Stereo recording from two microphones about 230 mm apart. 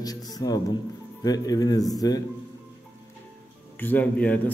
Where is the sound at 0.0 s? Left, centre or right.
Centre.